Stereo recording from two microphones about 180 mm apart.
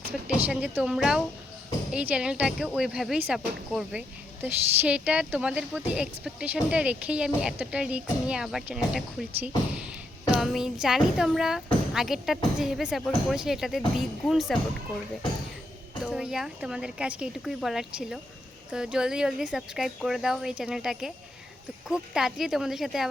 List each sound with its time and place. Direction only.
0.4 s speech: 10° right (ahead or behind)
16.0 s speech: centre (ahead or behind)